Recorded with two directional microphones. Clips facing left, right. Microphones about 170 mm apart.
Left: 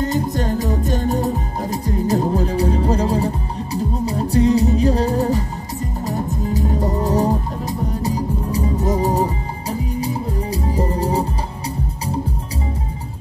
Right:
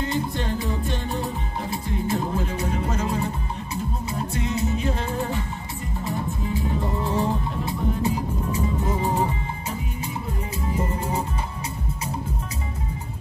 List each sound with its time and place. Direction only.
0.0 s music: 40° left (ahead or behind)